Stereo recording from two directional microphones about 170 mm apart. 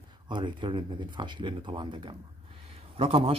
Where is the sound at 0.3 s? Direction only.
30° right (ahead or behind).